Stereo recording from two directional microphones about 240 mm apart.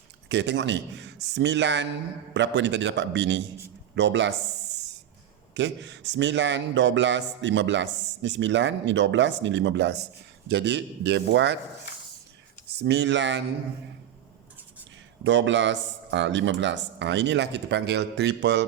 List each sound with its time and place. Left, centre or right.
0.3 s a man's voice: right
5.5 s a man's voice: right
12.8 s a man's voice: right
15.2 s a man's voice: right